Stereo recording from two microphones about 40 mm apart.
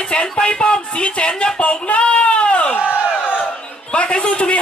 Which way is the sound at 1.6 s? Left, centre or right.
Left.